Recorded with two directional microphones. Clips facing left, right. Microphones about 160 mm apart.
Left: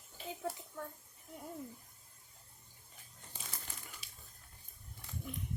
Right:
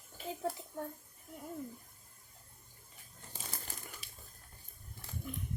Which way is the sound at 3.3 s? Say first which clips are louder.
Right 3 dB; 40° right (ahead or behind).